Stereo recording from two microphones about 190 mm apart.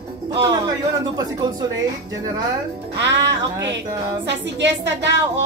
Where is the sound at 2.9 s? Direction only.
65° right (ahead or behind).